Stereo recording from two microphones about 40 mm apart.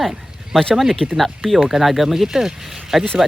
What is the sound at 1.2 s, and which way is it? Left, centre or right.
Speech, centre.